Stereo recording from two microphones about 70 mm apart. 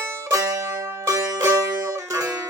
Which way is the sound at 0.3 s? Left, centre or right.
Right.